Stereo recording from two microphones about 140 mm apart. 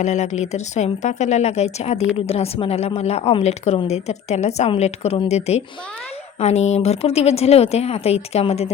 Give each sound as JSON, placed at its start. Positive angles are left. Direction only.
{"t": 0.0, "sound": "a woman's voice", "side_deg": 55}